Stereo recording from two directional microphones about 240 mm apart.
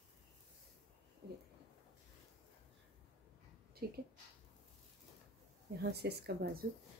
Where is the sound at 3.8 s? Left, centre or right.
Right.